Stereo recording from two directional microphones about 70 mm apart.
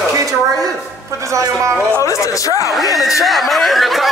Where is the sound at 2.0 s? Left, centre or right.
Left.